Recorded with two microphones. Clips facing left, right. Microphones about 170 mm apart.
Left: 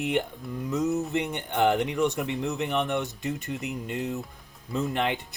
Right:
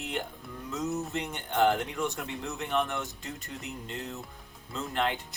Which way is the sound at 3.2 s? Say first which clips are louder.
Left 9 dB; 65° left (ahead or behind).